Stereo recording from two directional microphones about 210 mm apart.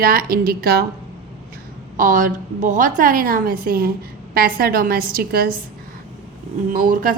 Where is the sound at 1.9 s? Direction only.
40° right (ahead or behind).